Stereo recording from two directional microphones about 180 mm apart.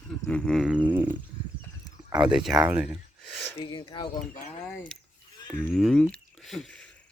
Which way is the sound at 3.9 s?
25° left (ahead or behind).